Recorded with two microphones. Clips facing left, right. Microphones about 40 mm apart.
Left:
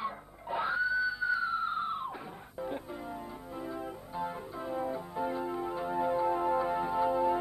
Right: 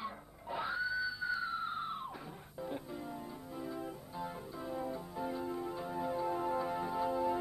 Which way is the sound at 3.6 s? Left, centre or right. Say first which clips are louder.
Left 3 dB; centre.